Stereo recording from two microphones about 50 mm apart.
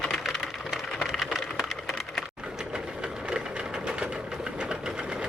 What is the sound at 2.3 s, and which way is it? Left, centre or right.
Sewing machine, centre.